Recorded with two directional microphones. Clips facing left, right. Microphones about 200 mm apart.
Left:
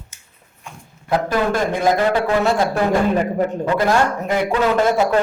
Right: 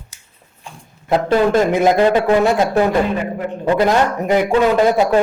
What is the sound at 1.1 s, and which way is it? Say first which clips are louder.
A man's voice: right 5 dB; 25° right (ahead or behind).